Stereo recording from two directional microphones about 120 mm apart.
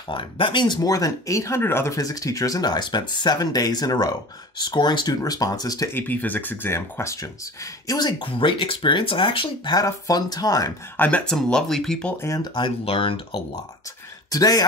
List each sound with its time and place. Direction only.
0.1 s speech: 45° left (ahead or behind)
5.9 s speech: 15° left (ahead or behind); by 8.1 s 30° left (ahead or behind)
8.2 s speech: 45° left (ahead or behind)
9.8 s speech: 30° left (ahead or behind)
11.0 s speech: 10° left (ahead or behind)
12.2 s speech: 25° left (ahead or behind)
12.8 s speech: 50° left (ahead or behind)
14.3 s speech: 30° left (ahead or behind)